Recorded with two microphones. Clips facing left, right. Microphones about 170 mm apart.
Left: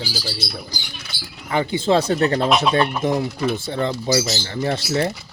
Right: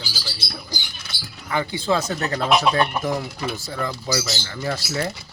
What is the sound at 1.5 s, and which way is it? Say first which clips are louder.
Speech: left 4 dB; 25° left (ahead or behind).